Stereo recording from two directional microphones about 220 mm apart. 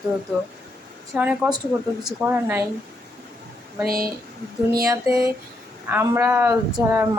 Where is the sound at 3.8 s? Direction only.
40° right (ahead or behind).